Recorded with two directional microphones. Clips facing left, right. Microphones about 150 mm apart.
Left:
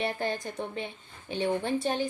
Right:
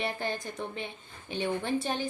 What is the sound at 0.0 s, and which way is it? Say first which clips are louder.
Speech: left 2 dB; 45° left (ahead or behind).